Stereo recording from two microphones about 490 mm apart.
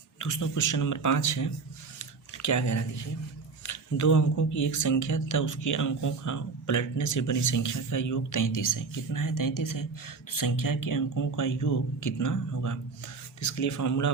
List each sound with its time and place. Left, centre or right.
0.2 s speech: left
2.0 s a sound: left
3.6 s speech: left